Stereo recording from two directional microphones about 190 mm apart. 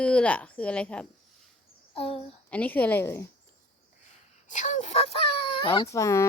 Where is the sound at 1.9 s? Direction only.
30° left (ahead or behind).